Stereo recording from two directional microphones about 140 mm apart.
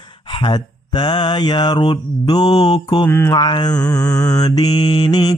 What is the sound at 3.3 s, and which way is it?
Mantra, 30° left (ahead or behind).